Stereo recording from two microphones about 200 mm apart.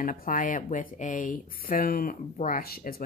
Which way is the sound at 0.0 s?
40° left (ahead or behind).